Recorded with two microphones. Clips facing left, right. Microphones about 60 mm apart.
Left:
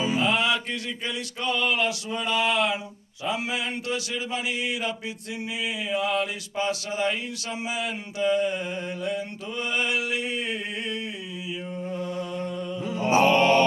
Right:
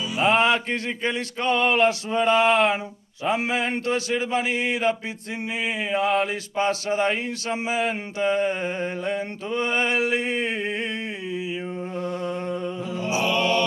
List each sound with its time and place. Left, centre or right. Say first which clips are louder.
0.2 s mantra: right 4 dB; right
12.8 s mantra: left 1 dB; left
13.1 s mantra: left 4 dB; left